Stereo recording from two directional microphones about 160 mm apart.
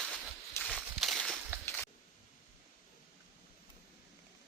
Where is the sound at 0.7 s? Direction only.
Centre (ahead or behind).